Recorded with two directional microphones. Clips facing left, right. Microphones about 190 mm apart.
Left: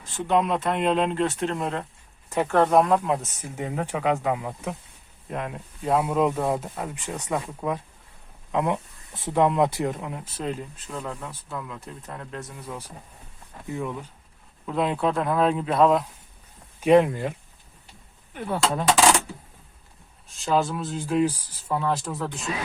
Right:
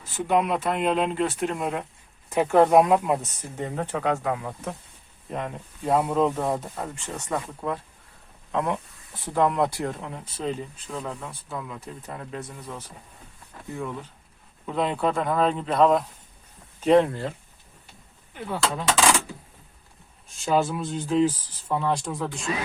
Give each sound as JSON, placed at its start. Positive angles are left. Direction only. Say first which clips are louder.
{"t": 0.3, "sound": "speech", "louder": "even", "side_deg": -5}
{"t": 3.4, "sound": "speech", "louder": "left 1 dB", "side_deg": 10}
{"t": 5.3, "sound": "speech", "louder": "even", "side_deg": 0}
{"t": 10.0, "sound": "speech", "louder": "even", "side_deg": 5}
{"t": 14.7, "sound": "speech", "louder": "left 1 dB", "side_deg": 0}
{"t": 20.2, "sound": "speech", "louder": "even", "side_deg": 0}